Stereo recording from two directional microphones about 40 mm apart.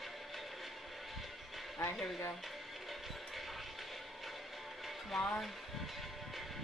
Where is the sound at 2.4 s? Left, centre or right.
Centre.